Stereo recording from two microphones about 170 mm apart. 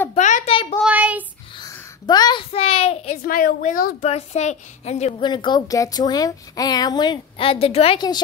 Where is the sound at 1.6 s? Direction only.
25° left (ahead or behind).